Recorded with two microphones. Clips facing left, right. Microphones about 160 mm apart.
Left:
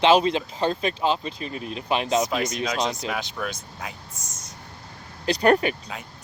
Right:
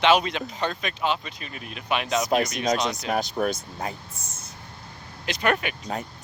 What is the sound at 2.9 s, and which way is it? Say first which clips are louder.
Speech: right 4 dB; 40° right (ahead or behind).